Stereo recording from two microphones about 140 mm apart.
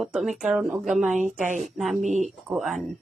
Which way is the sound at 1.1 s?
60° right (ahead or behind).